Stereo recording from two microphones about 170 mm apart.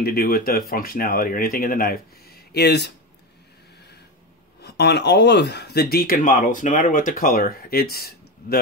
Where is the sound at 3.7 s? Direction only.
75° left (ahead or behind).